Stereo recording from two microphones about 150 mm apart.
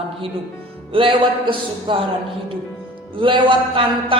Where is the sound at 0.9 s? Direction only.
35° right (ahead or behind).